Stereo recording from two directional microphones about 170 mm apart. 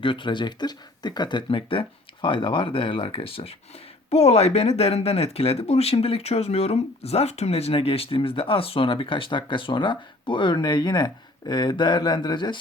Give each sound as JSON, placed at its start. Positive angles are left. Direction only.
{"t": 0.0, "sound": "speech", "side_deg": 30}